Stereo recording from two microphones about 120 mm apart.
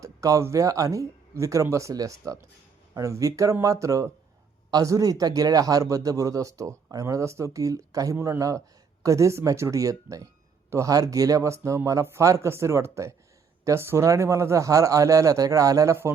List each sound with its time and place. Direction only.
0.0 s speech: 25° right (ahead or behind)